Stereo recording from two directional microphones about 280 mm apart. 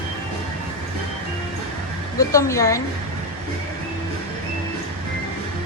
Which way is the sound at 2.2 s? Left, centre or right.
Centre.